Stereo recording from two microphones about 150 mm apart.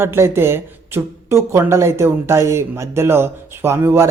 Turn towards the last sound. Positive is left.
turn(degrees=-15)  # may be behind; listen again after turning